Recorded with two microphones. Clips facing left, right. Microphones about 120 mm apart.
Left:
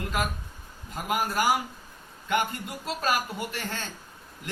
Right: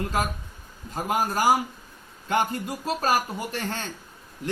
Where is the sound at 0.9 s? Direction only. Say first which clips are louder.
Right 2 dB; 35° right (ahead or behind).